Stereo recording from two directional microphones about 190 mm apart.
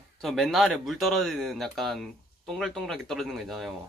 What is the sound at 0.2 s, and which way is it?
Speech, centre (ahead or behind).